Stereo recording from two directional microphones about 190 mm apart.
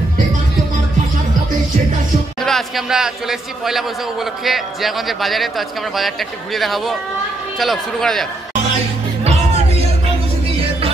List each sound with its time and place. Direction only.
2.4 s a man's voice: centre (ahead or behind)
9.2 s music: 30° right (ahead or behind)